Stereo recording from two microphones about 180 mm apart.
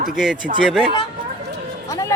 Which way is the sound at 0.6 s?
5° right (ahead or behind).